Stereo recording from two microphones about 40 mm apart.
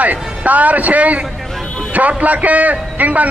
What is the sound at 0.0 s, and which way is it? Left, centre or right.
A man's voice, right.